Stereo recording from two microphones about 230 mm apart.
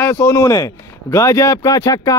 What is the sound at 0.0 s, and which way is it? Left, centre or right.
Speech, centre.